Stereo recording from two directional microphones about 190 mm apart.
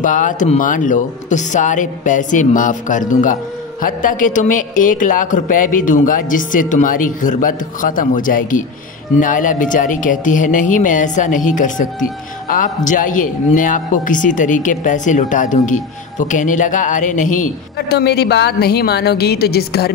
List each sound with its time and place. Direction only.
0.0 s speech: 40° left (ahead or behind)